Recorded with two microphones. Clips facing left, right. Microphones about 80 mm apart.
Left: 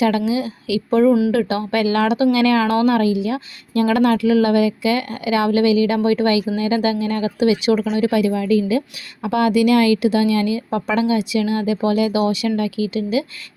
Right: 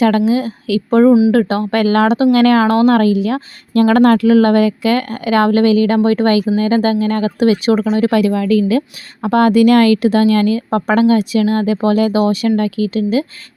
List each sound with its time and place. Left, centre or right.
0.3 s speech: right
8.2 s a woman's voice: right
9.2 s speech: right